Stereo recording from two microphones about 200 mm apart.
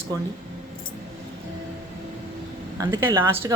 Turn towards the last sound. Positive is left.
turn(degrees=-10)  # may be behind; listen again after turning